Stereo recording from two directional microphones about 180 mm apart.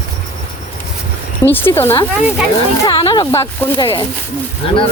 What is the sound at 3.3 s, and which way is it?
Speech, 15° left (ahead or behind).